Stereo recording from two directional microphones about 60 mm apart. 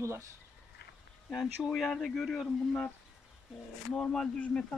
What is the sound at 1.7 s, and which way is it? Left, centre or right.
Speech, centre.